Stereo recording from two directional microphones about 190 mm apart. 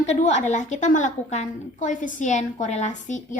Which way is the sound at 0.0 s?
35° left (ahead or behind).